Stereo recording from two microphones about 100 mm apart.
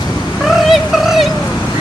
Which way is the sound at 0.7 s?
Centre (ahead or behind).